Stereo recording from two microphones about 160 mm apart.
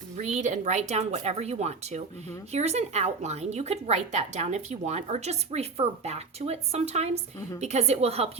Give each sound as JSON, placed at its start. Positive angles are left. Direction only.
{"t": 0.2, "sound": "a woman's voice", "side_deg": -45}